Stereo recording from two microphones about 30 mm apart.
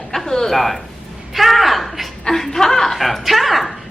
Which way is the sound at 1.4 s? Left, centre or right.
Centre.